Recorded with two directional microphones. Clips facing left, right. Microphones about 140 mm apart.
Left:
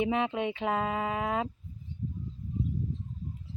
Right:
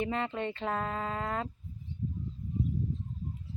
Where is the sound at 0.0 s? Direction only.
15° left (ahead or behind).